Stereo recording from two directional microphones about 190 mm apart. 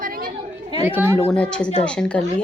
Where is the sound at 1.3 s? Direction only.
5° left (ahead or behind).